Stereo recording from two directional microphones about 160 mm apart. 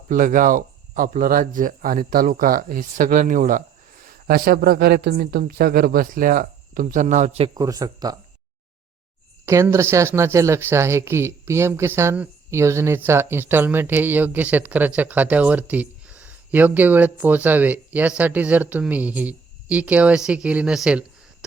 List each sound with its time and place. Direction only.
0.1 s speech: 55° right (ahead or behind)
7.5 s speech: 20° right (ahead or behind)
9.5 s speech: 20° right (ahead or behind)